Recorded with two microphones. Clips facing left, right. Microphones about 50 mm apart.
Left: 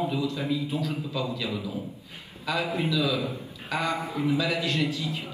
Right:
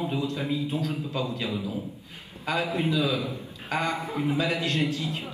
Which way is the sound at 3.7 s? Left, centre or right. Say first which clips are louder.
Even; right.